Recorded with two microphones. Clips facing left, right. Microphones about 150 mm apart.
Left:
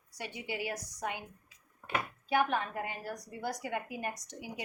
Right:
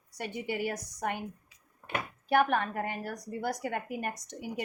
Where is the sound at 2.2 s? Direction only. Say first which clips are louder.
Right 5 dB; 60° right (ahead or behind).